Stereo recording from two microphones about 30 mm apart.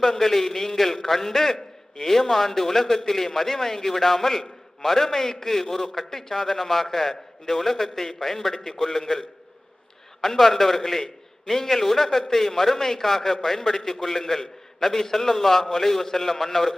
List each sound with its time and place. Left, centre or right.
0.0 s a man's voice: centre
10.2 s a man's voice: centre